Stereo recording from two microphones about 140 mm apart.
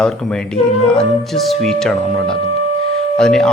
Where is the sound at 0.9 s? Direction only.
5° left (ahead or behind).